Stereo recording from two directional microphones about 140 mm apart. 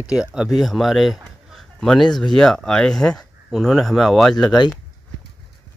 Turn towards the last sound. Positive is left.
turn(degrees=5)  # may be behind; listen again after turning